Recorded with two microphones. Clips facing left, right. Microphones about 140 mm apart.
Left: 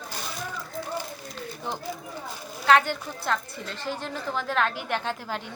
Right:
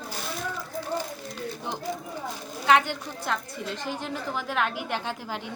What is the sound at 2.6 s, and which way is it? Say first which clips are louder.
A woman's voice: left 1 dB; 15° right (ahead or behind).